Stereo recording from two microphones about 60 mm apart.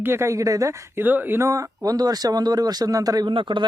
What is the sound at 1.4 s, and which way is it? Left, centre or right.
Speech, right.